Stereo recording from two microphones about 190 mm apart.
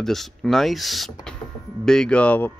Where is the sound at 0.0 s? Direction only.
Centre (ahead or behind).